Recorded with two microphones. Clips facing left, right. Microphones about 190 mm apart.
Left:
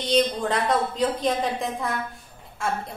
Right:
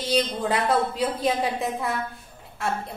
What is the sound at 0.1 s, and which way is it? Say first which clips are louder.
A woman's voice: left 2 dB; 5° right (ahead or behind).